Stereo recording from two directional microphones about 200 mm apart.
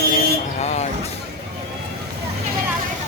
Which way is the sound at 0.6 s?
35° left (ahead or behind).